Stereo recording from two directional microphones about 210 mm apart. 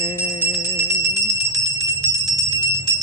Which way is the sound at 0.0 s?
20° left (ahead or behind).